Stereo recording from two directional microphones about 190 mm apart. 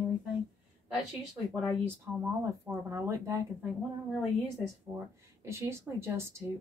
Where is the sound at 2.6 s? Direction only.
15° right (ahead or behind).